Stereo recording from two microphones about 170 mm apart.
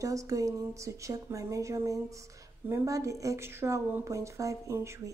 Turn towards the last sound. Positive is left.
turn(degrees=-15)  # may be behind; listen again after turning